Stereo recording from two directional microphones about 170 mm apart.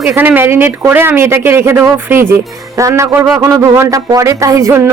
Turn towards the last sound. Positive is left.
turn(degrees=-15)  # may be behind; listen again after turning